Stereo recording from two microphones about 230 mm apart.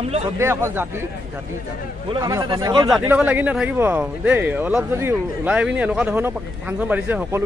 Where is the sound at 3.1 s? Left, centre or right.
Centre.